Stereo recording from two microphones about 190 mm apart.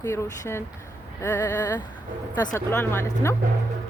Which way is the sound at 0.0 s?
15° left (ahead or behind).